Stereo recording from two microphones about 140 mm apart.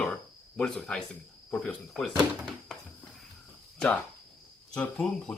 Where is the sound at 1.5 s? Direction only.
10° left (ahead or behind).